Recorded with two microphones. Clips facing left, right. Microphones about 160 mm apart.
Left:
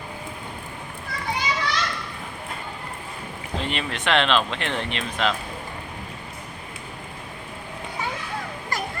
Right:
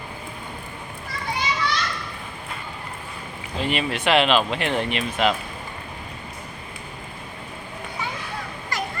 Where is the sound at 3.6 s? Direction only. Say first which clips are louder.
Right 5 dB; 10° right (ahead or behind).